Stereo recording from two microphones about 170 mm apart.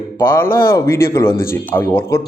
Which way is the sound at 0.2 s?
15° left (ahead or behind).